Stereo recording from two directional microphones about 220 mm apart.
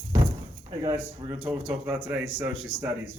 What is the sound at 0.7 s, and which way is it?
A man's voice, 15° right (ahead or behind).